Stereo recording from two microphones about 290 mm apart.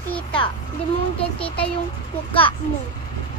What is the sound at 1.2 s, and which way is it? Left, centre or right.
Speech, centre.